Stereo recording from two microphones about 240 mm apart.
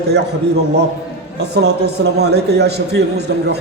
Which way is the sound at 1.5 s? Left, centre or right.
Right.